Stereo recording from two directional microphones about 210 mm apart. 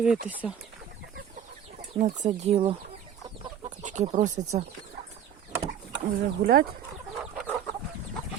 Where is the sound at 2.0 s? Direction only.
30° right (ahead or behind).